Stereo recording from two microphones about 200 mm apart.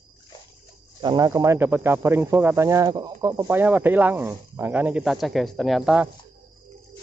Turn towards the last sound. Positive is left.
turn(degrees=0)  # may be behind; listen again after turning